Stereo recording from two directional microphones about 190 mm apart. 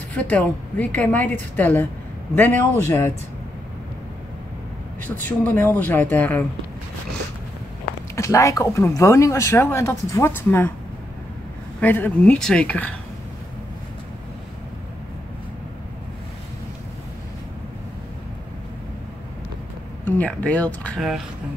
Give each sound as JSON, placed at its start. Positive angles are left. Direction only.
{"t": 0.1, "sound": "speech", "side_deg": 5}
{"t": 5.2, "sound": "speech", "side_deg": 10}
{"t": 8.2, "sound": "speech", "side_deg": 15}
{"t": 11.8, "sound": "speech", "side_deg": 10}
{"t": 20.1, "sound": "speech", "side_deg": 10}